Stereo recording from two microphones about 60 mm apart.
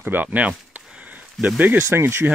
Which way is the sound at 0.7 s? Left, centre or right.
Right.